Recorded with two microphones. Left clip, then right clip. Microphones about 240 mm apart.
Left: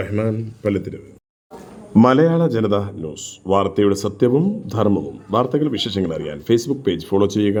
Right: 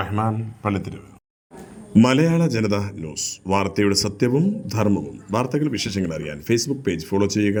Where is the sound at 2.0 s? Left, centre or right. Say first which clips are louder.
Left 6 dB; centre.